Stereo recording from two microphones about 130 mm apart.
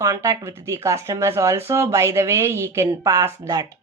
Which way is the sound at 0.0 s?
25° right (ahead or behind).